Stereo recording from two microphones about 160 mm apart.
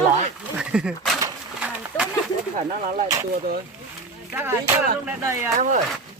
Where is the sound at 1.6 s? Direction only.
5° right (ahead or behind).